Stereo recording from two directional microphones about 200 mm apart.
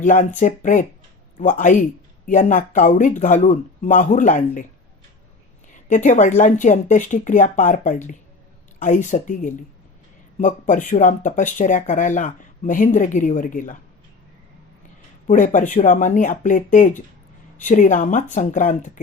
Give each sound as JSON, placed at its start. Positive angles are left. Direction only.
{"t": 0.0, "sound": "speech", "side_deg": 40}
{"t": 5.9, "sound": "speech", "side_deg": 35}
{"t": 15.3, "sound": "speech", "side_deg": 40}